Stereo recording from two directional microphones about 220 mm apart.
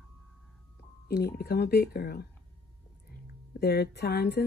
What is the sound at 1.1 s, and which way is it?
A woman's voice, 45° left (ahead or behind).